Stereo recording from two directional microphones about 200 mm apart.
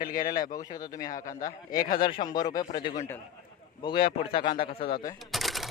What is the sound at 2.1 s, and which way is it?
Speech, 20° left (ahead or behind).